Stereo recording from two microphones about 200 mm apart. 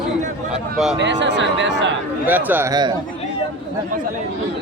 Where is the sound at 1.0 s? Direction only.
60° right (ahead or behind).